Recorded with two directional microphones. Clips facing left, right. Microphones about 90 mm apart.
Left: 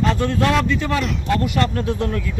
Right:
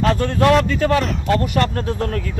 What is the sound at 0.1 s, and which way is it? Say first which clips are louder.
A man's voice: right 3 dB; 45° right (ahead or behind).